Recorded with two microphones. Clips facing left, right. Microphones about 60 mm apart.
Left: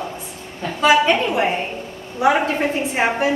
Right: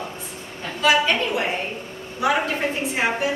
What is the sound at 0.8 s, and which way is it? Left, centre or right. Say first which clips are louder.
Speech: left 4 dB; left.